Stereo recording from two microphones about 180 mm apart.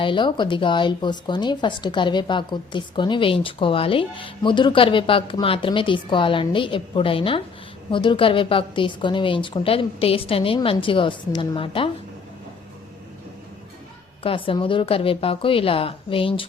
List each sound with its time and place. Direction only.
0.0 s speech: 25° left (ahead or behind)
14.3 s a woman's voice: 30° left (ahead or behind)